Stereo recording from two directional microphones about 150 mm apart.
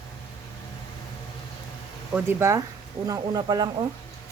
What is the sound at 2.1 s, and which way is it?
Speech, 20° right (ahead or behind).